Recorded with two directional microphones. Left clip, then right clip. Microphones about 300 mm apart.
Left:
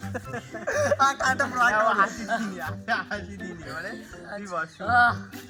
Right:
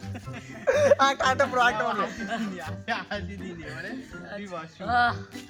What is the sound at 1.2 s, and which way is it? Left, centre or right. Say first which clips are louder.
Speech: right 1 dB; centre.